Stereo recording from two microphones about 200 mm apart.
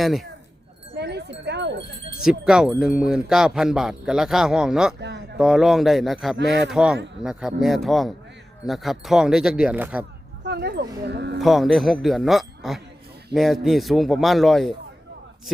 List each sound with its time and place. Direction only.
0.0 s speech: centre (ahead or behind)
0.9 s a sound: 60° right (ahead or behind)
2.2 s speech: 5° right (ahead or behind)
4.9 s a sound: 60° right (ahead or behind)
5.4 s speech: 5° right (ahead or behind)
10.4 s speech: 55° right (ahead or behind)
11.3 s speech: centre (ahead or behind)